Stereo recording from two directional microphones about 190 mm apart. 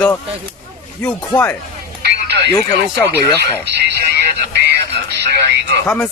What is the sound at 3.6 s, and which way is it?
Music, 60° right (ahead or behind).